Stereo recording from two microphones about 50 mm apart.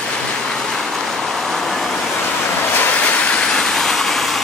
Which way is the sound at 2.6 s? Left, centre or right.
Left.